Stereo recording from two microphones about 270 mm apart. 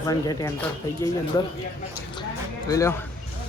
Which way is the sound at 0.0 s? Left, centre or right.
Centre.